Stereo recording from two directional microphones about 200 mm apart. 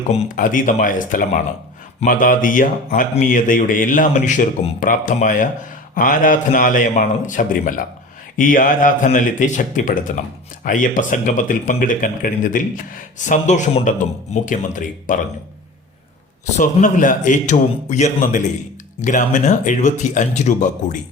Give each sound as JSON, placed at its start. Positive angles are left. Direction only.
{"t": 0.1, "sound": "speech", "side_deg": 40}
{"t": 16.6, "sound": "speech", "side_deg": 40}